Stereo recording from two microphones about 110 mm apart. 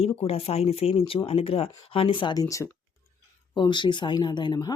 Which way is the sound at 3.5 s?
45° left (ahead or behind).